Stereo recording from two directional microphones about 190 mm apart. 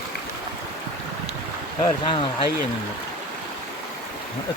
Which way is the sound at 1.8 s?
25° left (ahead or behind).